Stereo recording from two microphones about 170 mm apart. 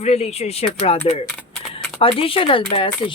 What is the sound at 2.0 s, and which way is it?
Speech, 35° left (ahead or behind).